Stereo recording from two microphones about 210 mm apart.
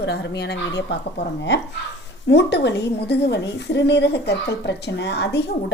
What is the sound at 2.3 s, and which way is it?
A woman's voice, 55° left (ahead or behind).